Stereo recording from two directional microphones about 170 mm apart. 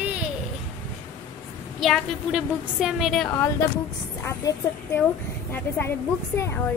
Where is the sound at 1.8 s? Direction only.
Centre (ahead or behind).